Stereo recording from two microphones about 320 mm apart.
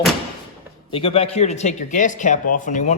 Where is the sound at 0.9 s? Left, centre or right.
Centre.